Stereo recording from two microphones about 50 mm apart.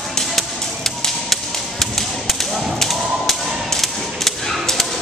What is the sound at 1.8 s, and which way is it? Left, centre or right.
Thump, centre.